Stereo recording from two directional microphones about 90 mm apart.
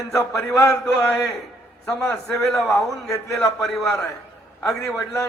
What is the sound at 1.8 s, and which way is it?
A man's voice, 5° left (ahead or behind).